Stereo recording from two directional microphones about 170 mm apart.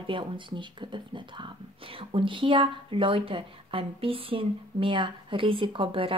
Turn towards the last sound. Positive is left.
turn(degrees=-30)  # may be behind; listen again after turning